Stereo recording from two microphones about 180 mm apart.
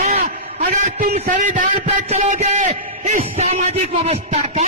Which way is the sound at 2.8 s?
50° right (ahead or behind).